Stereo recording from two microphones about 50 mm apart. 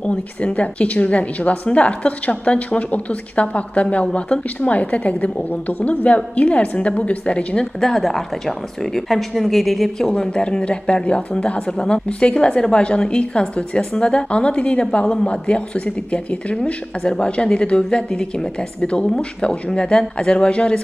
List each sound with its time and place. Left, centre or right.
0.0 s a woman's voice: left
7.8 s speech: centre
10.1 s a woman's voice: centre
17.1 s a woman's voice: centre